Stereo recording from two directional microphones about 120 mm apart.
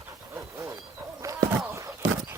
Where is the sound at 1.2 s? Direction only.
25° right (ahead or behind).